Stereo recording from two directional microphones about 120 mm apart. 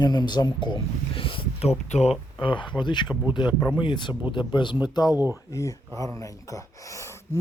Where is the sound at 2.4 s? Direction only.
40° left (ahead or behind).